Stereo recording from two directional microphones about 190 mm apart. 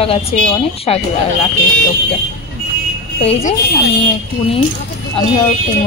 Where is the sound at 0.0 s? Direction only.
30° left (ahead or behind).